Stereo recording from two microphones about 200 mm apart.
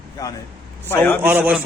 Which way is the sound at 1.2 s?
10° right (ahead or behind).